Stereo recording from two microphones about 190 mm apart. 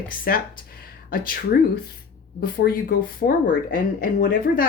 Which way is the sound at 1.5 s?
55° left (ahead or behind).